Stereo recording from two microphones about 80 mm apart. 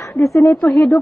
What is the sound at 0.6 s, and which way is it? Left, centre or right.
Speech, centre.